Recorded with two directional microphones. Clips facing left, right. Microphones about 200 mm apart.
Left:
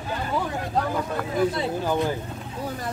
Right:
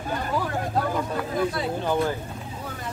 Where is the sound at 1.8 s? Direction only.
15° left (ahead or behind).